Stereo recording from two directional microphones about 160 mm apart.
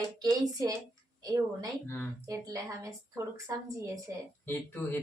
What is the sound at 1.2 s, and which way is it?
A woman's voice, 20° right (ahead or behind).